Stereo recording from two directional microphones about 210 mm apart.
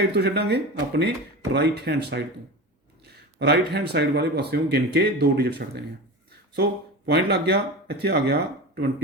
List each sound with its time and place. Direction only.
0.0 s speech: 50° right (ahead or behind)
3.3 s speech: 50° right (ahead or behind)